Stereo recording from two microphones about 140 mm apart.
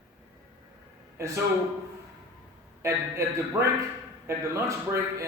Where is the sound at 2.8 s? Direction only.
20° right (ahead or behind).